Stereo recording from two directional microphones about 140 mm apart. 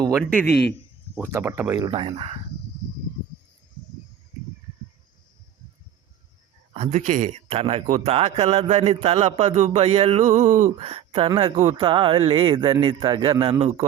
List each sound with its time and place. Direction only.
0.3 s a man's voice: 10° left (ahead or behind)
1.1 s speech: 15° right (ahead or behind)
1.9 s a man's voice: 40° right (ahead or behind)
6.7 s a man's voice: 55° right (ahead or behind)
10.8 s a man's voice: 45° right (ahead or behind)